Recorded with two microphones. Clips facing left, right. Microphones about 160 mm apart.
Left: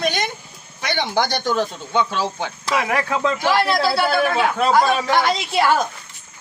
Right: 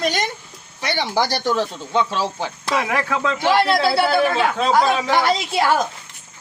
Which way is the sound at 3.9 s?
5° right (ahead or behind).